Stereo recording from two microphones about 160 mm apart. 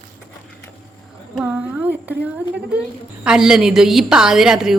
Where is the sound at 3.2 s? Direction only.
5° right (ahead or behind).